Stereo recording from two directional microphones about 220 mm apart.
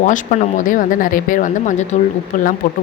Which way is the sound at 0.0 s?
35° left (ahead or behind).